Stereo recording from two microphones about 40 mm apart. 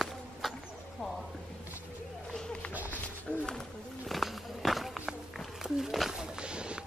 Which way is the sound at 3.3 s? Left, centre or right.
Centre.